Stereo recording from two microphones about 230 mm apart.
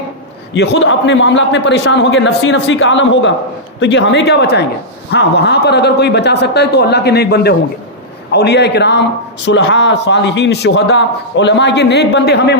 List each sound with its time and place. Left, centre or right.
0.5 s a man's voice: left